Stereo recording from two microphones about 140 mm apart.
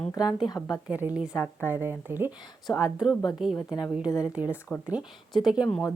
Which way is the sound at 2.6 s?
5° right (ahead or behind).